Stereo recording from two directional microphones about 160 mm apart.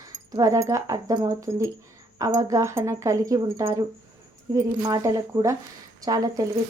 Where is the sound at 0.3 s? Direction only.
20° right (ahead or behind).